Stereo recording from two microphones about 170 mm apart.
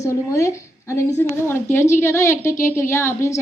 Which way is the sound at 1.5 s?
15° left (ahead or behind).